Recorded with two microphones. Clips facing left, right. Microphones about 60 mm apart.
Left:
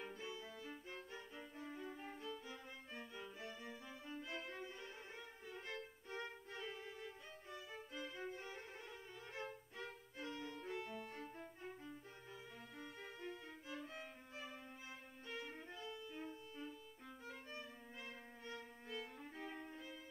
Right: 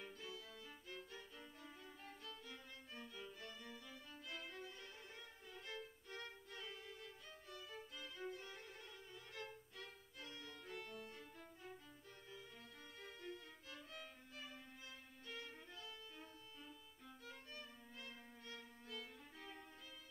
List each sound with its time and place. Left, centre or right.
0.0 s music: left
5.5 s violin: left
11.1 s violin: left
15.2 s music: left
17.3 s violin: left